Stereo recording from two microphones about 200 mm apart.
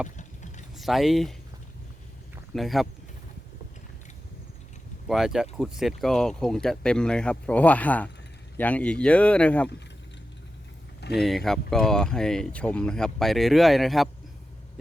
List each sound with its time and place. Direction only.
0.2 s mechanisms: 40° left (ahead or behind)
0.8 s speech: centre (ahead or behind)
2.5 s speech: centre (ahead or behind)
5.0 s speech: centre (ahead or behind)
11.2 s speech: centre (ahead or behind)